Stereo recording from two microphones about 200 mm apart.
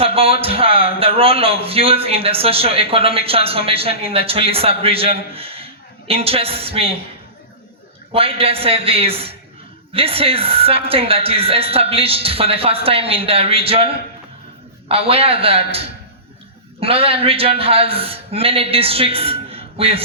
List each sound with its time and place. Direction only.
0.0 s a man's voice: 30° right (ahead or behind)
8.1 s a man's voice: 30° right (ahead or behind)